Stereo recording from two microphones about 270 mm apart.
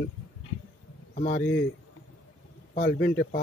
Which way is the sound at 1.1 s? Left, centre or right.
Left.